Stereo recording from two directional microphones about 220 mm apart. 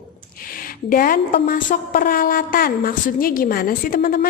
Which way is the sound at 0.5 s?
40° left (ahead or behind).